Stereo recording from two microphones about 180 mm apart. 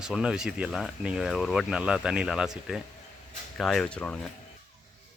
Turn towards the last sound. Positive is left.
turn(degrees=5)  # may be behind; listen again after turning